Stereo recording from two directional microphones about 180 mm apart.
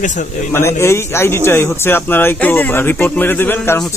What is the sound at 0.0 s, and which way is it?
Speech, 45° left (ahead or behind).